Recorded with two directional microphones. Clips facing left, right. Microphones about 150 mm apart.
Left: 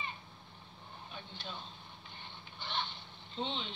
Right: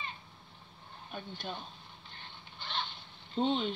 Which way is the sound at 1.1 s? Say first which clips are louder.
Right 8 dB; 50° right (ahead or behind).